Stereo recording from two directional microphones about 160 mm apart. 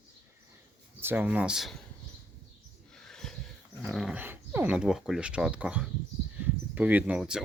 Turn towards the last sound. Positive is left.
turn(degrees=-5)  # may be behind; listen again after turning